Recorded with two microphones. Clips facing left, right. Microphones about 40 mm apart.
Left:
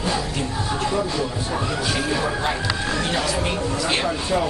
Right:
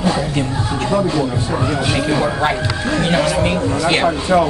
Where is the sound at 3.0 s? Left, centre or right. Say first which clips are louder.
Right 9 dB; right.